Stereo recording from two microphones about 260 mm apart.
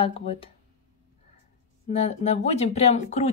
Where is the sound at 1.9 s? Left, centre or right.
Left.